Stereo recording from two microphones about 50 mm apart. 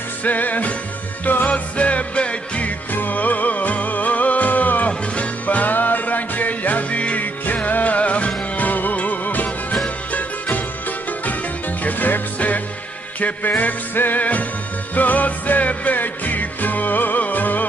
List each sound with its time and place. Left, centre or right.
0.2 s music: left
2.9 s music: left
11.8 s music: left